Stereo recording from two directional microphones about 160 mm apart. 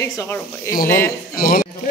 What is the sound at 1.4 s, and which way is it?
Speech, 65° left (ahead or behind).